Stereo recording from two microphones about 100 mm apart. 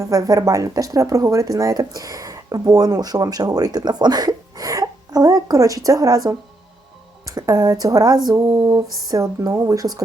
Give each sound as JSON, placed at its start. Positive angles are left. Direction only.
{"t": 0.0, "sound": "speech", "side_deg": -35}